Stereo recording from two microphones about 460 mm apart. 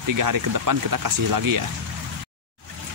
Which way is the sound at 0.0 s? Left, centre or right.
Right.